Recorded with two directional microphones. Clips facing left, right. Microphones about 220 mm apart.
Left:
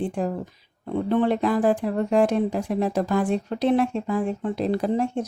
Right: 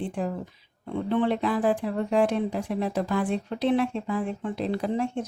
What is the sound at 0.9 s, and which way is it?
A woman's voice, 40° left (ahead or behind).